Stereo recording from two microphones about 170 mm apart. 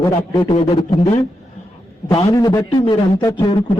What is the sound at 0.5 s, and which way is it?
Speech, 35° left (ahead or behind).